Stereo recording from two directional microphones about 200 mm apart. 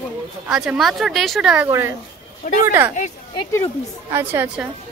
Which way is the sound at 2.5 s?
40° left (ahead or behind).